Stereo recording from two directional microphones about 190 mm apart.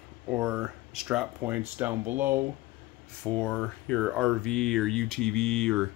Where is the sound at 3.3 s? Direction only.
5° left (ahead or behind).